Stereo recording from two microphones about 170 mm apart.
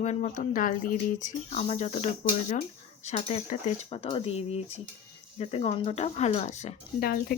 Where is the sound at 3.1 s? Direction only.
40° left (ahead or behind).